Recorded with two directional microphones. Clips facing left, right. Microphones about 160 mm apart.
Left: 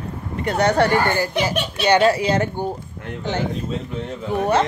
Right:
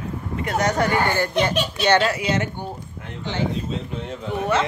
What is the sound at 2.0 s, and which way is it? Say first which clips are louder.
Speech: left 5 dB; 35° left (ahead or behind).